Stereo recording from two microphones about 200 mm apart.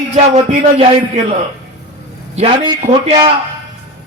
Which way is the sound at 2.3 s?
30° right (ahead or behind).